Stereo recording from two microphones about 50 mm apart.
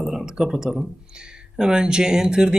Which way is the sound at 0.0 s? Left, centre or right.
Centre.